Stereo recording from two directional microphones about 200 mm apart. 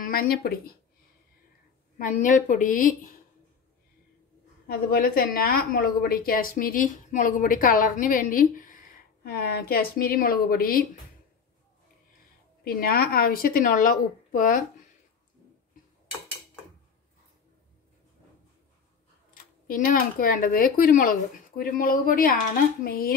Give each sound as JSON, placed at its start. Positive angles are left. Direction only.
{"t": 0.0, "sound": "speech", "side_deg": 45}
{"t": 2.0, "sound": "a woman's voice", "side_deg": 40}
{"t": 4.6, "sound": "a woman's voice", "side_deg": 45}
{"t": 12.6, "sound": "a woman's voice", "side_deg": 50}
{"t": 19.3, "sound": "a woman's voice", "side_deg": 45}